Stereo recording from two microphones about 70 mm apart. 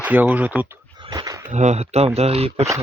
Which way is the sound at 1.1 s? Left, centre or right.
Right.